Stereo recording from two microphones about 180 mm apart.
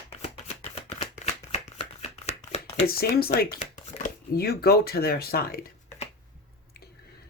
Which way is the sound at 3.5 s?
40° left (ahead or behind).